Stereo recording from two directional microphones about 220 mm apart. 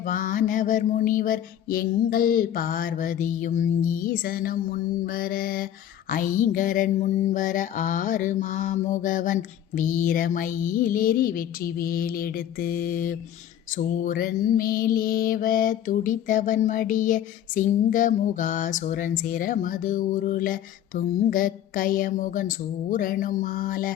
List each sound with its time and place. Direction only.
0.0 s mantra: 40° left (ahead or behind)